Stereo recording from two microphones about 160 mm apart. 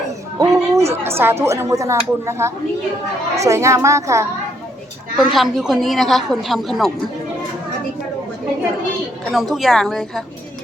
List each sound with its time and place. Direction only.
0.3 s a sound: 20° right (ahead or behind)
1.0 s a woman's voice: 15° right (ahead or behind)
5.1 s a woman's voice: centre (ahead or behind)
9.3 s a woman's voice: centre (ahead or behind)